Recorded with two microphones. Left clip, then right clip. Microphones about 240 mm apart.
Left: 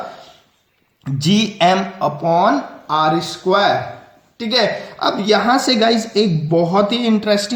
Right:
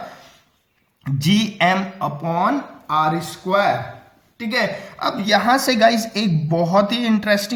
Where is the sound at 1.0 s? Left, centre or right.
Right.